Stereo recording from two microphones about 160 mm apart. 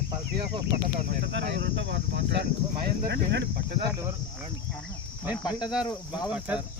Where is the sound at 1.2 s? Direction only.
90° right.